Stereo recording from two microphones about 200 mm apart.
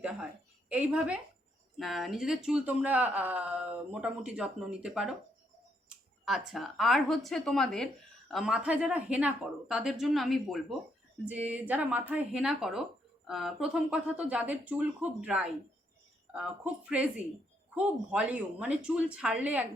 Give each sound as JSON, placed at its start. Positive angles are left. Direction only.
{"t": 0.7, "sound": "speech", "side_deg": -5}
{"t": 6.2, "sound": "speech", "side_deg": 0}
{"t": 16.9, "sound": "speech", "side_deg": -5}